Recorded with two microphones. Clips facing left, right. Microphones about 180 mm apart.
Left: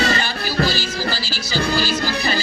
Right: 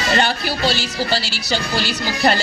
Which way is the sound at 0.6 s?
70° right (ahead or behind).